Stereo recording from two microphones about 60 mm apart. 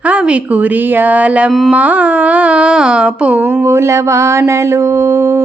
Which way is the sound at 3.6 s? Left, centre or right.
Right.